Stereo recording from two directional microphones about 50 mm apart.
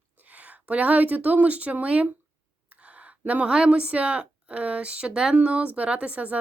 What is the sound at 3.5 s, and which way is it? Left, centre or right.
A woman's voice, centre.